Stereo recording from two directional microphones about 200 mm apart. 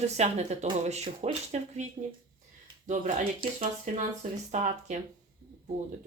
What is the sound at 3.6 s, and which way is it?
Speech, 40° right (ahead or behind).